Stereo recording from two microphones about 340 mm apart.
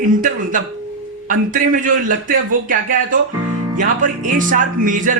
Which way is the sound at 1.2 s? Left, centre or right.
Right.